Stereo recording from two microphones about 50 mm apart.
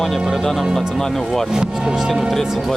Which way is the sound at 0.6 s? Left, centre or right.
Centre.